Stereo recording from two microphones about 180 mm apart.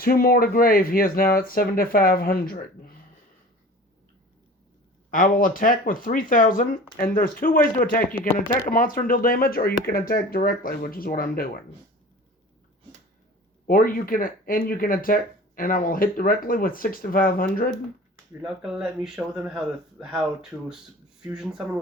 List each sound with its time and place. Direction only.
0.0 s speech: 55° left (ahead or behind)
5.1 s speech: 50° left (ahead or behind)
13.7 s speech: 50° left (ahead or behind)
18.4 s speech: 5° right (ahead or behind)